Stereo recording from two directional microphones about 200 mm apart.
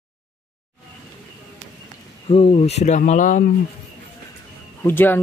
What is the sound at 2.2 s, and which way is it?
Speech, 30° left (ahead or behind).